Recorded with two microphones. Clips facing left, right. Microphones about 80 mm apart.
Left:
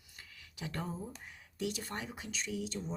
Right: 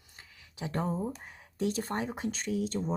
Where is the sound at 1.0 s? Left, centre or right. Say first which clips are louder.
Right 9 dB; right.